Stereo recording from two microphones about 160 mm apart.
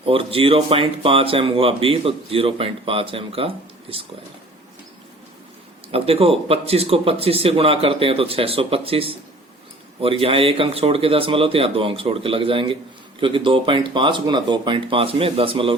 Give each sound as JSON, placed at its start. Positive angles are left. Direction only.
{"t": 0.0, "sound": "speech", "side_deg": -35}
{"t": 5.9, "sound": "speech", "side_deg": -35}